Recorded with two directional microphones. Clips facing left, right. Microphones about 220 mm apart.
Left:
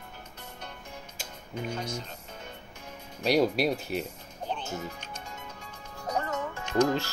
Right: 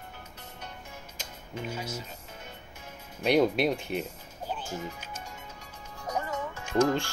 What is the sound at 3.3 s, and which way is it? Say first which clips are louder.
Speech: right 1 dB; 5° left (ahead or behind).